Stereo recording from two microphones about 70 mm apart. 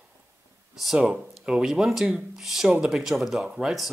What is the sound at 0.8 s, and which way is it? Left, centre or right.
Speech, centre.